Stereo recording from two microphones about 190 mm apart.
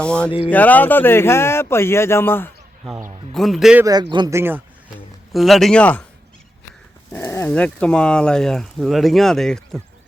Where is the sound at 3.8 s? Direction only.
20° right (ahead or behind).